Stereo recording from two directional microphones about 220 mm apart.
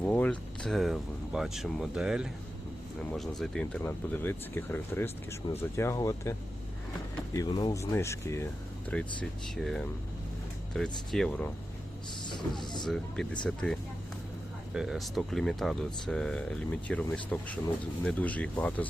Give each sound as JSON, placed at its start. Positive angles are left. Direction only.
{"t": 0.0, "sound": "speech", "side_deg": 5}
{"t": 7.3, "sound": "speech", "side_deg": 20}
{"t": 12.3, "sound": "speech", "side_deg": 20}
{"t": 12.8, "sound": "speech", "side_deg": 5}